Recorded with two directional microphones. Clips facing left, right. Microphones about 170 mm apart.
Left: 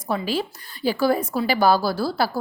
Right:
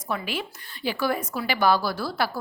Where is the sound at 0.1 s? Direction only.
30° left (ahead or behind).